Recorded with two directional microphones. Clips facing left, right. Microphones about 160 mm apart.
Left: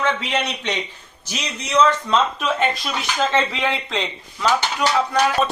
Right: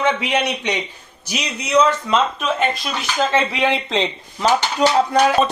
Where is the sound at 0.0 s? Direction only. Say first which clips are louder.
Right 3 dB; 15° right (ahead or behind).